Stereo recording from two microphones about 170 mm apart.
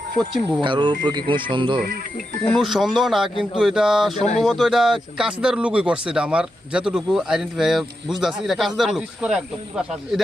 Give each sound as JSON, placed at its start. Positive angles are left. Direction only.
{"t": 0.6, "sound": "speech", "side_deg": -30}
{"t": 2.6, "sound": "speech", "side_deg": 0}